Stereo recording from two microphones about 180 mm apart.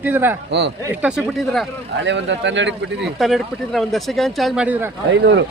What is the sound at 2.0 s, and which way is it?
Speech, 85° right.